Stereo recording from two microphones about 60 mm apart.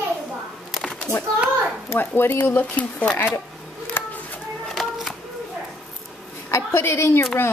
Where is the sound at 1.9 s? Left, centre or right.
Left.